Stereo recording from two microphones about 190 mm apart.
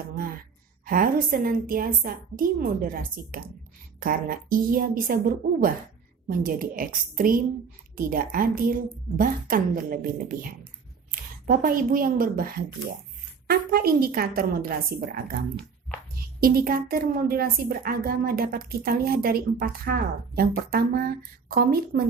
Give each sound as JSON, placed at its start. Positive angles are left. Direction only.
{"t": 0.9, "sound": "a woman's voice", "side_deg": -50}
{"t": 16.4, "sound": "a woman's voice", "side_deg": -50}